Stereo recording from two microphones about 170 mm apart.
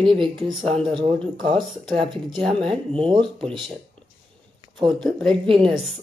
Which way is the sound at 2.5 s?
30° right (ahead or behind).